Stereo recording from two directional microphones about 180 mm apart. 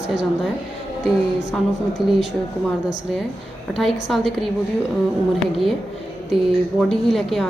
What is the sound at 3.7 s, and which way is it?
Speech, centre (ahead or behind).